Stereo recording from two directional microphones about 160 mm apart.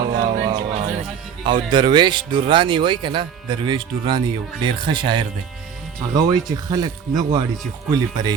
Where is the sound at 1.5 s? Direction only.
30° right (ahead or behind).